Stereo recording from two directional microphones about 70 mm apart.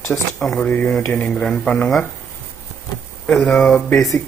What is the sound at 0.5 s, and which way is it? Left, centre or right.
Speech, centre.